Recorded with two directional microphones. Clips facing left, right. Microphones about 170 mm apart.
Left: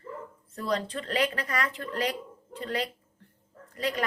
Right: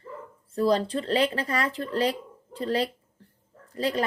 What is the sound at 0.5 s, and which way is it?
Speech, 30° right (ahead or behind).